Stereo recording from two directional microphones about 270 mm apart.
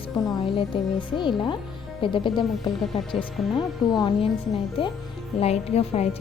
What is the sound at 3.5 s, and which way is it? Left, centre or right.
A woman's voice, centre.